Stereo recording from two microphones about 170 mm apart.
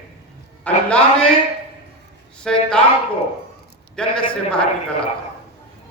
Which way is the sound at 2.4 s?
5° left (ahead or behind).